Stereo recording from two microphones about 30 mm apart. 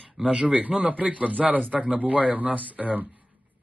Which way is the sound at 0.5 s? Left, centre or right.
Right.